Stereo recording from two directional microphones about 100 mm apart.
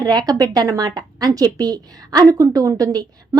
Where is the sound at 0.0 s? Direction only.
40° right (ahead or behind).